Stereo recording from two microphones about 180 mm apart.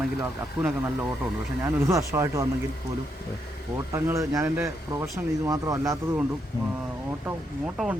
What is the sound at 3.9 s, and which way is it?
Speech, 15° right (ahead or behind).